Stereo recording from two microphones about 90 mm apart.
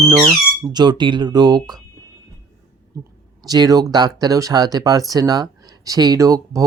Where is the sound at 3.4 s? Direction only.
45° right (ahead or behind).